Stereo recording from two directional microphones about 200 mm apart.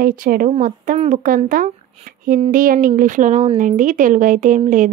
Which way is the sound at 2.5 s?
45° right (ahead or behind).